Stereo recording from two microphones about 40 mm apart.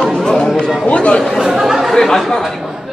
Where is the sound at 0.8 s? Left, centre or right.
Left.